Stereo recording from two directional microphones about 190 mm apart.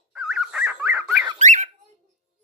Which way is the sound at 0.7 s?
15° right (ahead or behind).